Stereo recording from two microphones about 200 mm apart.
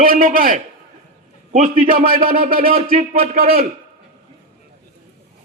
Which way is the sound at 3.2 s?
45° right (ahead or behind).